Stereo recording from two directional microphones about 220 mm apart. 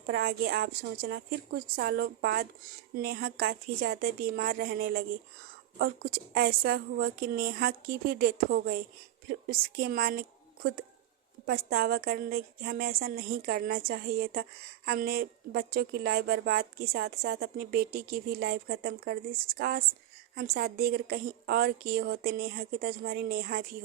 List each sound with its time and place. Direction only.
0.1 s a woman's voice: 45° right (ahead or behind)